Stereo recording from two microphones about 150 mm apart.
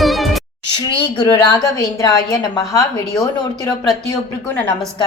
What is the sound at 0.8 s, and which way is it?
A woman's voice, 30° left (ahead or behind).